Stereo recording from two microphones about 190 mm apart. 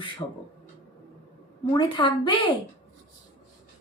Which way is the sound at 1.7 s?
25° left (ahead or behind).